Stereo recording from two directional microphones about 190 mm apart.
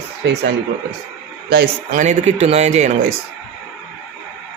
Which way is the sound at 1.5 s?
60° right (ahead or behind).